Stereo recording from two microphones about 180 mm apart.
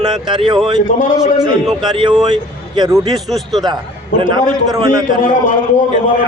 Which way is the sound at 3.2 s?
Centre (ahead or behind).